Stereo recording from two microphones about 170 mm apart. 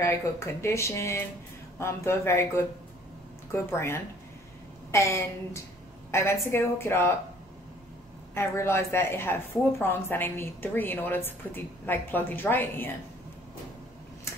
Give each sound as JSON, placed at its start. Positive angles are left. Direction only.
{"t": 0.0, "sound": "a woman's voice", "side_deg": 15}
{"t": 8.4, "sound": "a woman's voice", "side_deg": 15}